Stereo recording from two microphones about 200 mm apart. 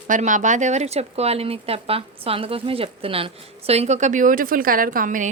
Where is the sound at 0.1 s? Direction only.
40° right (ahead or behind).